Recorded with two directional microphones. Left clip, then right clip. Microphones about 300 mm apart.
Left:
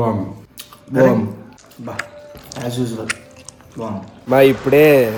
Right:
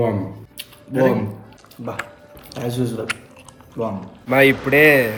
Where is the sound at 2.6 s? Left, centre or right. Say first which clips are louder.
Even; centre.